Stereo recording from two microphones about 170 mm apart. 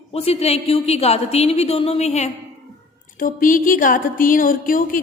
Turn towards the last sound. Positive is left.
turn(degrees=55)  # may be behind; listen again after turning